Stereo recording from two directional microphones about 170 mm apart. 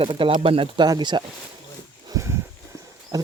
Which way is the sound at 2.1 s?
15° right (ahead or behind).